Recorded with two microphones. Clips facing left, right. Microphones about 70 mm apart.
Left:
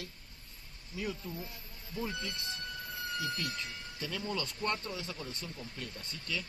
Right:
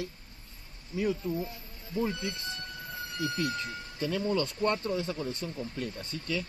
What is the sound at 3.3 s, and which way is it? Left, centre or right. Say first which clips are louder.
Speech: right 6 dB; right.